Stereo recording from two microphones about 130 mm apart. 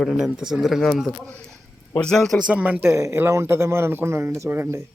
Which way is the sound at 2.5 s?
10° right (ahead or behind).